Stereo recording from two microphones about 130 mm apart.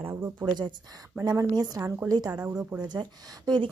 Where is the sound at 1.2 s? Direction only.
30° right (ahead or behind).